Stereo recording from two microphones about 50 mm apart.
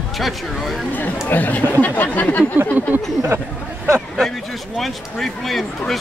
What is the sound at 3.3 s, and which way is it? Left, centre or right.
Speech, right.